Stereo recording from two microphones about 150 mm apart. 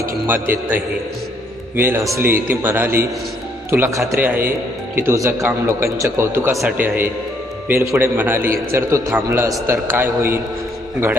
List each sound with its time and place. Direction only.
0.3 s a man's voice: 15° right (ahead or behind)